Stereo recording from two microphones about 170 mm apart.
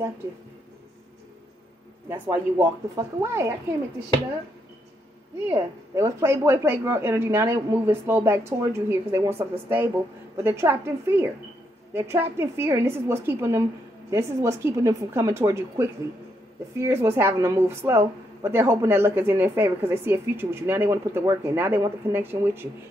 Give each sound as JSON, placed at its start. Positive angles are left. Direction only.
{"t": 2.0, "sound": "a woman's voice", "side_deg": -15}
{"t": 5.5, "sound": "a woman's voice", "side_deg": -15}